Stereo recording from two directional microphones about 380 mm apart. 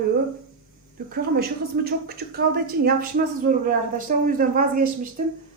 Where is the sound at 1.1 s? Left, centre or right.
Right.